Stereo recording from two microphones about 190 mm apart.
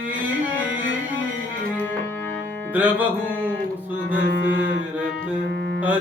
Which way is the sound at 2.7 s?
10° right (ahead or behind).